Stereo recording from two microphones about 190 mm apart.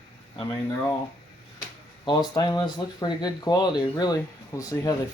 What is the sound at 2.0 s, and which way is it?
Speech, 20° left (ahead or behind).